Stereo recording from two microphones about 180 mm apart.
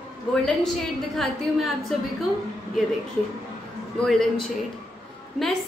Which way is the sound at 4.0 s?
Centre (ahead or behind).